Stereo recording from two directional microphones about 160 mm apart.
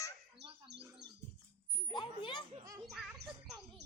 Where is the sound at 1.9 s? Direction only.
30° left (ahead or behind).